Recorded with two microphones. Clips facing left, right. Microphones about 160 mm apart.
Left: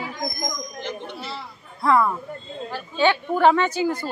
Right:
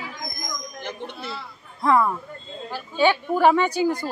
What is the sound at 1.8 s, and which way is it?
A woman's voice, 15° right (ahead or behind).